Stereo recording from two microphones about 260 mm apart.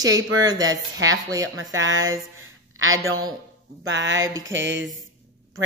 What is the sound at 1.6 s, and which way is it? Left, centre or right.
A woman's voice, right.